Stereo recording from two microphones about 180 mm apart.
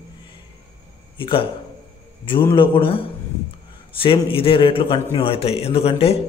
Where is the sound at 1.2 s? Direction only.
30° left (ahead or behind).